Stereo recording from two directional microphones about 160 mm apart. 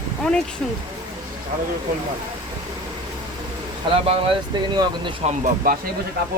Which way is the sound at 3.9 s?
40° right (ahead or behind).